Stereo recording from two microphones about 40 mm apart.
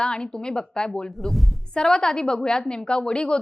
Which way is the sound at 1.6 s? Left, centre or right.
Centre.